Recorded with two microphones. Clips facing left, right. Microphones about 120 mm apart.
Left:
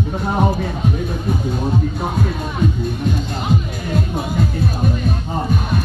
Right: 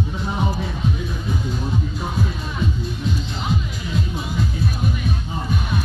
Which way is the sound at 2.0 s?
55° left (ahead or behind).